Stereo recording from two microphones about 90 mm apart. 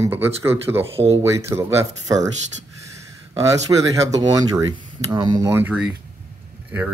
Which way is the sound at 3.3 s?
35° right (ahead or behind).